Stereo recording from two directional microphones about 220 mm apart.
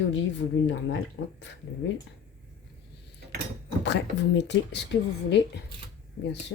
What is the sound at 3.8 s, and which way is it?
Speech, 50° left (ahead or behind).